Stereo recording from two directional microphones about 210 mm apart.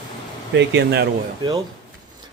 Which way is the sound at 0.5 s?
55° right (ahead or behind).